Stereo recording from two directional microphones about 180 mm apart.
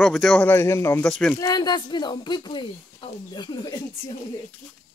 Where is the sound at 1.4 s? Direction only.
20° left (ahead or behind).